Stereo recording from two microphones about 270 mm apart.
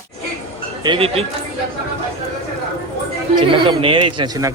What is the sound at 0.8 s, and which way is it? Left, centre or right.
Speech, centre.